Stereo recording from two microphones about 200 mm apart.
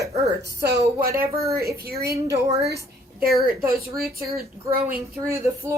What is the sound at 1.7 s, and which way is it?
Speech, 50° right (ahead or behind).